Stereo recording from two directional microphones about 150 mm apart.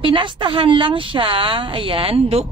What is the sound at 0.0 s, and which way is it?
A woman's voice, 35° right (ahead or behind).